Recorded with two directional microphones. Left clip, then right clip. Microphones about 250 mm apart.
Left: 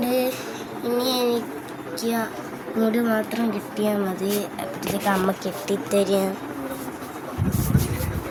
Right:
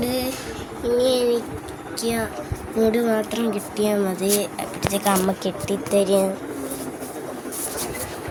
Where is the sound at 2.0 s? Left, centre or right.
Centre.